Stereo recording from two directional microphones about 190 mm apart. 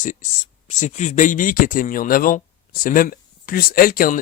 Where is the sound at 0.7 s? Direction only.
40° left (ahead or behind).